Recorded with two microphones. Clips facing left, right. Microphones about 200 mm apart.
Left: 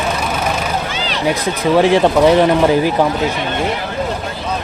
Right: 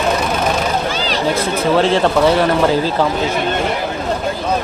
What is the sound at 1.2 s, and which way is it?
Speech, 15° left (ahead or behind).